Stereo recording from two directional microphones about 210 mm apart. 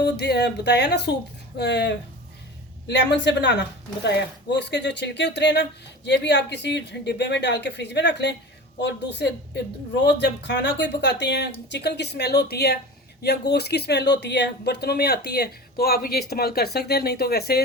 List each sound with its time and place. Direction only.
0.0 s speech: 50° left (ahead or behind)